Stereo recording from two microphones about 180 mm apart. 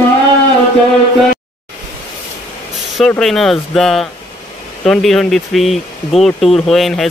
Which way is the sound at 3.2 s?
Centre (ahead or behind).